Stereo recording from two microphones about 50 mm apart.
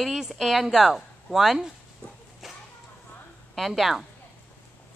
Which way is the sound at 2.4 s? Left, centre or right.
Centre.